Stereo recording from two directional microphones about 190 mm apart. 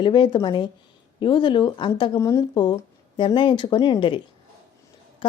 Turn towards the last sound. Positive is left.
turn(degrees=25)  # may be behind; listen again after turning